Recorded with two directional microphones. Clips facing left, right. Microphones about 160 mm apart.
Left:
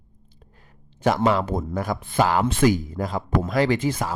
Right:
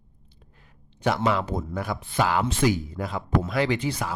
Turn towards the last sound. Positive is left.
turn(degrees=45)  # may be behind; listen again after turning